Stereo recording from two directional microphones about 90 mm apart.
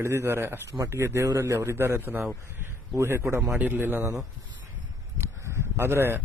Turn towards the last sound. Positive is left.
turn(degrees=-25)  # may be behind; listen again after turning